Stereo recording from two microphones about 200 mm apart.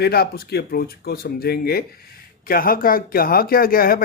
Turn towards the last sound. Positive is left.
turn(degrees=45)  # may be behind; listen again after turning